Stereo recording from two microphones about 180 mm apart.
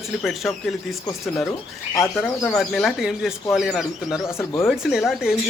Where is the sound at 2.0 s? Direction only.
Centre (ahead or behind).